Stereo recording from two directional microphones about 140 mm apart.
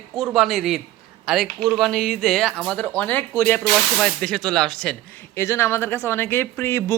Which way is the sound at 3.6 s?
5° left (ahead or behind).